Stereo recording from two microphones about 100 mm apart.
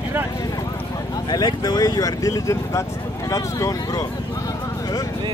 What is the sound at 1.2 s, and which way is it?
Speech, 40° left (ahead or behind).